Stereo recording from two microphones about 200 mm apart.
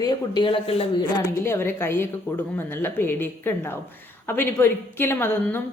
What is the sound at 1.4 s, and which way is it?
A woman's voice, 10° left (ahead or behind).